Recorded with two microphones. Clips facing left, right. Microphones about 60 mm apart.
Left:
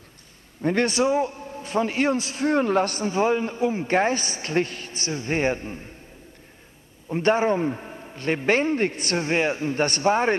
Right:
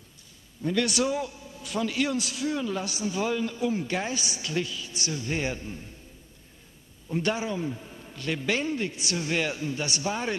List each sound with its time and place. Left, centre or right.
0.6 s a man's voice: left
0.8 s a man's voice: left
2.4 s a man's voice: left
7.1 s a man's voice: left